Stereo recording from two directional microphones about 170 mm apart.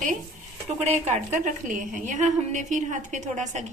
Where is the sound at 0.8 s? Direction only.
45° right (ahead or behind).